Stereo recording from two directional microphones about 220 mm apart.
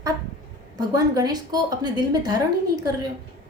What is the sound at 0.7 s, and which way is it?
A woman's voice, 15° right (ahead or behind).